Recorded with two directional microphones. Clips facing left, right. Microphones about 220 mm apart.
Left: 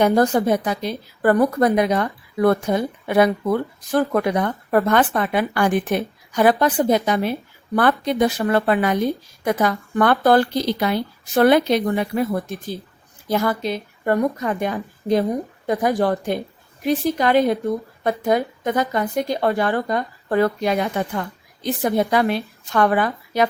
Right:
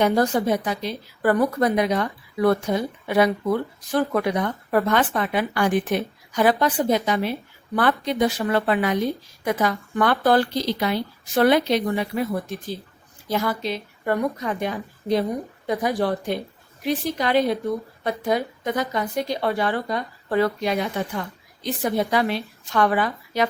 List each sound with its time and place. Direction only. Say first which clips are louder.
0.0 s speech: left 3 dB; 50° left (ahead or behind)